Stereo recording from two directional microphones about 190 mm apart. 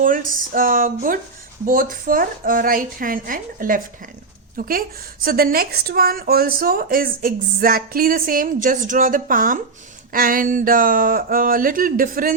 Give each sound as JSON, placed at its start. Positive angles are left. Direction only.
{"t": 0.0, "sound": "speech", "side_deg": -45}